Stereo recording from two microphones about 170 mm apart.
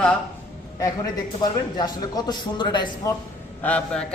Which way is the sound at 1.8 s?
25° left (ahead or behind).